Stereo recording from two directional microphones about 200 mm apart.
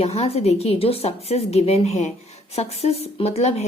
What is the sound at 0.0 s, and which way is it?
Speech, 30° left (ahead or behind).